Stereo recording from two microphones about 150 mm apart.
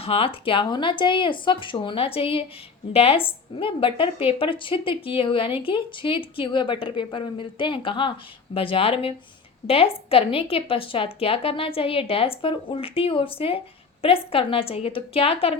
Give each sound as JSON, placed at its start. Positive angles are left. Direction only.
{"t": 0.0, "sound": "a woman's voice", "side_deg": 40}